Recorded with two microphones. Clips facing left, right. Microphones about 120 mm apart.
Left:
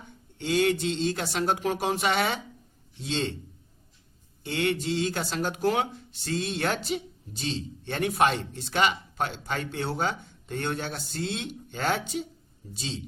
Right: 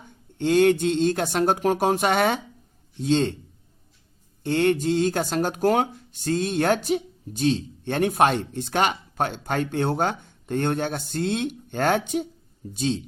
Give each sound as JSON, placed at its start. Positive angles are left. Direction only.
{"t": 0.3, "sound": "speech", "side_deg": -50}
{"t": 4.4, "sound": "speech", "side_deg": -45}